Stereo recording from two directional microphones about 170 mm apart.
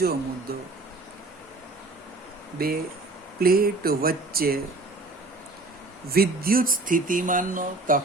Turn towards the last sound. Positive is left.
turn(degrees=-55)  # may be behind; listen again after turning